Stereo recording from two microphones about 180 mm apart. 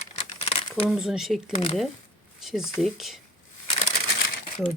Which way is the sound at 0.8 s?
5° right (ahead or behind).